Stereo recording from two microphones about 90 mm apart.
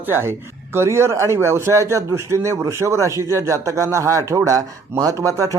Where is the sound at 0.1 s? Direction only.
25° right (ahead or behind).